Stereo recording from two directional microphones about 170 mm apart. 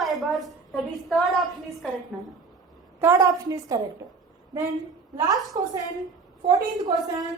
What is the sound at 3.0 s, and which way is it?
Speech, 20° right (ahead or behind).